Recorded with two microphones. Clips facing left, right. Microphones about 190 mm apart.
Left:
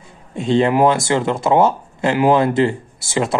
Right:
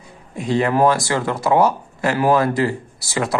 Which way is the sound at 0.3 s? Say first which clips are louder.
Left 3 dB; 25° left (ahead or behind).